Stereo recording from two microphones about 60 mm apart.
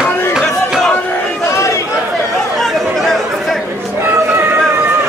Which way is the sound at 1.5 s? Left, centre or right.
Left.